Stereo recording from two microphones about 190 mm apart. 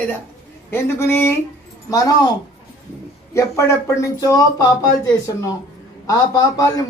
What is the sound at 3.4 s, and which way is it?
A man's voice, 15° left (ahead or behind).